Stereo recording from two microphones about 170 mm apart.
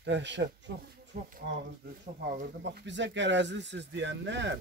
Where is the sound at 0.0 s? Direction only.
90° right.